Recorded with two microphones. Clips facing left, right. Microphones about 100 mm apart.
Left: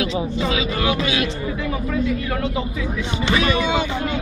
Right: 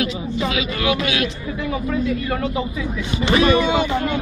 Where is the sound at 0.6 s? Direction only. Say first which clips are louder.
Even; 30° left (ahead or behind).